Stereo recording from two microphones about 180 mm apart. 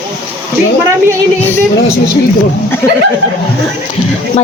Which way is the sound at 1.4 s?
10° left (ahead or behind).